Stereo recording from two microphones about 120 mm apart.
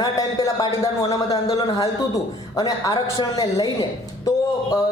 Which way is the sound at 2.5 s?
30° left (ahead or behind).